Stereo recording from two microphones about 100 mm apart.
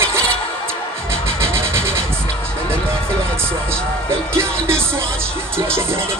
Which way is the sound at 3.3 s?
25° right (ahead or behind).